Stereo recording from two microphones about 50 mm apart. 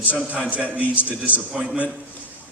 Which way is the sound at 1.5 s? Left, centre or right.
Centre.